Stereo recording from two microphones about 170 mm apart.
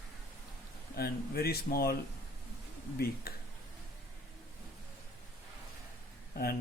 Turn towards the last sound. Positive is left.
turn(degrees=60)  # may be behind; listen again after turning